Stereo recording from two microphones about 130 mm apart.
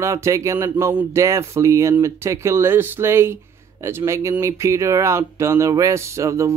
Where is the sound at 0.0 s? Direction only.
25° right (ahead or behind).